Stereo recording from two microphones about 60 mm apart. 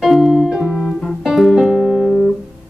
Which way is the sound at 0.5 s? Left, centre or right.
Centre.